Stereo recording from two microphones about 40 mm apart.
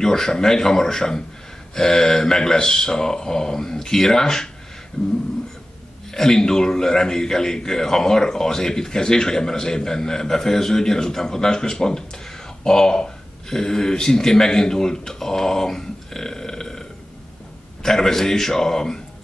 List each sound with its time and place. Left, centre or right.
0.0 s a man's voice: centre
5.0 s a sound: left
6.1 s a man's voice: centre
17.8 s a man's voice: centre